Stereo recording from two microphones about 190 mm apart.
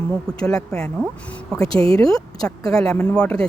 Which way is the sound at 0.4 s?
5° left (ahead or behind).